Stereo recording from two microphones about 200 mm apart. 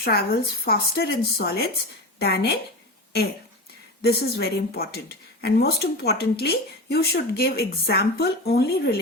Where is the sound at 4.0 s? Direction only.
50° left (ahead or behind).